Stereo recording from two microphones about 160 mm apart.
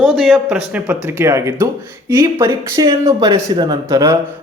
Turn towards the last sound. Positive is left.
turn(degrees=-20)  # may be behind; listen again after turning